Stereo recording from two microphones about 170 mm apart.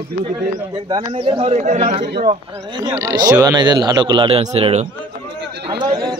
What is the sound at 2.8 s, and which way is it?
Speech, 20° right (ahead or behind).